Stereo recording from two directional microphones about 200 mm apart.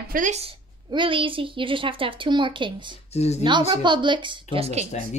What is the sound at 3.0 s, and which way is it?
Speech, 30° left (ahead or behind).